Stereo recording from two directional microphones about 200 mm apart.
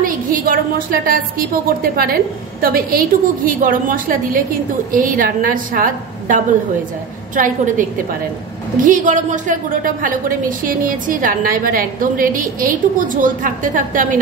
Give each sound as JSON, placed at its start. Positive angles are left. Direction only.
{"t": 0.0, "sound": "a woman's voice", "side_deg": -45}
{"t": 8.8, "sound": "a woman's voice", "side_deg": -40}